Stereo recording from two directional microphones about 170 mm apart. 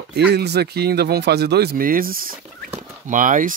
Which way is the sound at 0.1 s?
75° right (ahead or behind).